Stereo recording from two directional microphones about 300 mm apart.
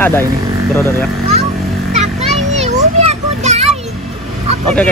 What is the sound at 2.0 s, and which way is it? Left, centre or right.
Children playing, right.